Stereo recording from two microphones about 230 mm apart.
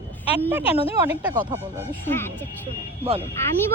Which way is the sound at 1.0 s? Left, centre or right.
Centre.